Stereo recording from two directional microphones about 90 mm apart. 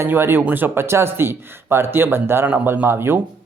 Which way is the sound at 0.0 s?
25° right (ahead or behind).